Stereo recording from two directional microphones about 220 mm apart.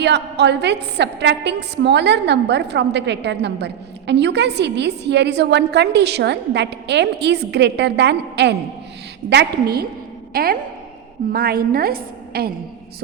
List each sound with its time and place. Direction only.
0.0 s a woman's voice: 50° right (ahead or behind)